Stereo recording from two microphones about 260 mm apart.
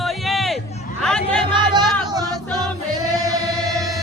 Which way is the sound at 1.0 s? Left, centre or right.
Centre.